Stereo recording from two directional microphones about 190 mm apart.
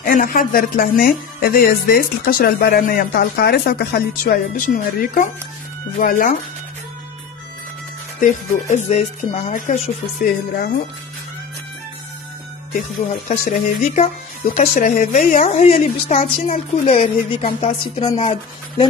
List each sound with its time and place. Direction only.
0.0 s speech: 45° left (ahead or behind)
8.2 s a woman's voice: 40° left (ahead or behind)
10.2 s speech: 50° left (ahead or behind)
13.3 s a woman's voice: 40° left (ahead or behind)